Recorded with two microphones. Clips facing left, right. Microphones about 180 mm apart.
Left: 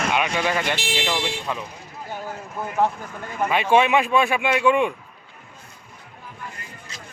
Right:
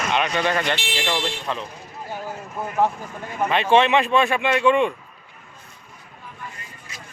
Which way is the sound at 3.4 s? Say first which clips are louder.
Right 1 dB; 10° left (ahead or behind).